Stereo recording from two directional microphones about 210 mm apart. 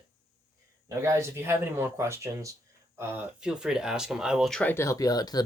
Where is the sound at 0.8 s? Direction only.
15° right (ahead or behind).